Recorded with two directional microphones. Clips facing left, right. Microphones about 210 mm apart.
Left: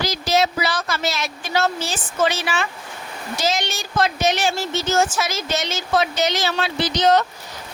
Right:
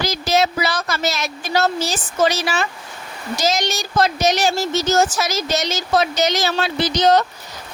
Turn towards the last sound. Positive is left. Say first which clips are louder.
# right 2 dB
turn(degrees=-40)  # may be behind; listen again after turning